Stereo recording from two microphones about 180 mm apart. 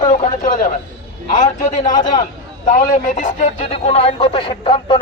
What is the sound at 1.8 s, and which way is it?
Speech, 25° left (ahead or behind).